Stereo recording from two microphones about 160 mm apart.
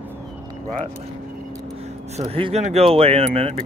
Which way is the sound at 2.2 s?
35° right (ahead or behind).